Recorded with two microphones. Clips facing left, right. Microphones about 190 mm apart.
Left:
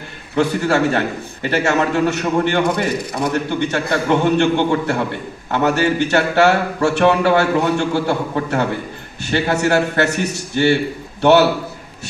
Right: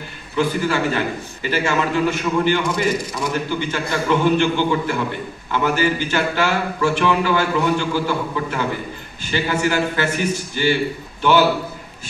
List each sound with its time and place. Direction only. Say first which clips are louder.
0.4 s a man's voice: left 3 dB; 70° left (ahead or behind)